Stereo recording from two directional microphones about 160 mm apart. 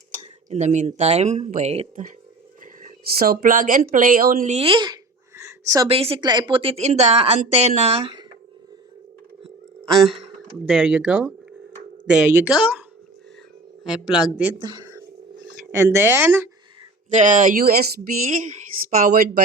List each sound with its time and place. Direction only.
0.1 s speech: 45° right (ahead or behind)
2.8 s speech: 65° right (ahead or behind)
4.5 s a woman's voice: 35° right (ahead or behind)
5.4 s a sound: 20° right (ahead or behind)
5.9 s a woman's voice: 35° right (ahead or behind)
10.7 s a woman's voice: 5° right (ahead or behind)
13.8 s a woman's voice: 5° right (ahead or behind)
14.6 s a sound: 30° right (ahead or behind)
17.1 s speech: 50° right (ahead or behind)